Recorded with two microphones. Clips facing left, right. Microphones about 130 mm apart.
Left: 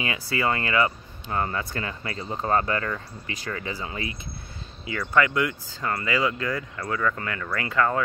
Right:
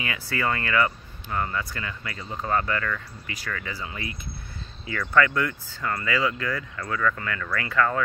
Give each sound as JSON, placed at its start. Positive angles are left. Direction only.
{"t": 0.3, "sound": "speech", "side_deg": 20}